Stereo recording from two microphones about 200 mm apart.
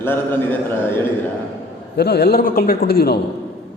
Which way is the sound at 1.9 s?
55° left (ahead or behind).